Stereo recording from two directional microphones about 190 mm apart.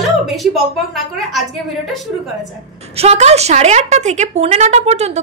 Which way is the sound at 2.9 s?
35° right (ahead or behind).